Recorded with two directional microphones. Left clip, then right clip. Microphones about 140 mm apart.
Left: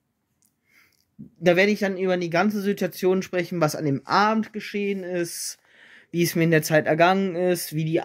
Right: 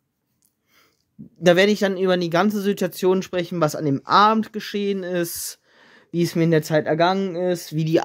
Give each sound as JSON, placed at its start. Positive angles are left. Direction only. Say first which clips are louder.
{"t": 1.4, "sound": "speech", "louder": "right 3 dB", "side_deg": -35}
{"t": 4.5, "sound": "speech", "louder": "right 3 dB", "side_deg": -50}